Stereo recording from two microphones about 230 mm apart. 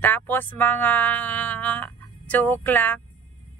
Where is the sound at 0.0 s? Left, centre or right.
Centre.